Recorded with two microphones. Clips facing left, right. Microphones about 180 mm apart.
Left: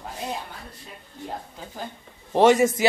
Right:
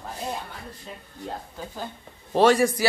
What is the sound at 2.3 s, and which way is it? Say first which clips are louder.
Speech: left 2 dB; 20° left (ahead or behind).